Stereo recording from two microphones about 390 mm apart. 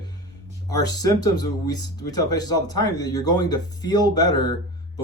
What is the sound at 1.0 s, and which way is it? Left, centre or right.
Speech, centre.